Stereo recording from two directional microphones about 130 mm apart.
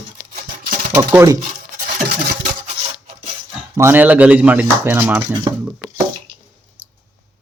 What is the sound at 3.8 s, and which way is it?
Speech, 15° right (ahead or behind).